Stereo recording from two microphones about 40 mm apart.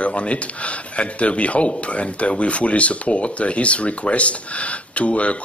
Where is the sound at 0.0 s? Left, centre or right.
Left.